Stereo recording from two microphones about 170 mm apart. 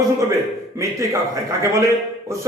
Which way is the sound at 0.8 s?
20° right (ahead or behind).